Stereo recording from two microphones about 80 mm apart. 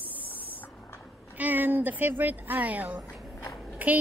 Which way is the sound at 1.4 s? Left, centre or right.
Right.